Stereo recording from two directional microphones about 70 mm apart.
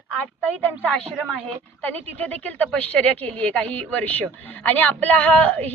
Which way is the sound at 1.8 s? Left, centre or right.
Left.